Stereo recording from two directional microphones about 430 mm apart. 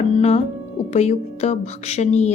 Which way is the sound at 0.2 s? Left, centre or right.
Centre.